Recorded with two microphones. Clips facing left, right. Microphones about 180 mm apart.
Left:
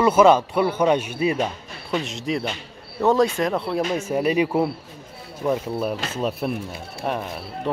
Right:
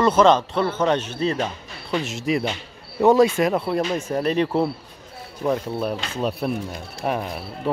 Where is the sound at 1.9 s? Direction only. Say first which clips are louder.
Right 2 dB; 5° right (ahead or behind).